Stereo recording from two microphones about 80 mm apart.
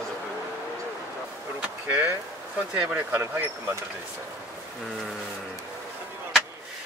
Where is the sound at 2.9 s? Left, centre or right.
Right.